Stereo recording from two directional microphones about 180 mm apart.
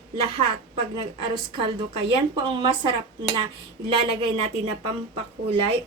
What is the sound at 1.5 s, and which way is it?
A woman's voice, 30° right (ahead or behind).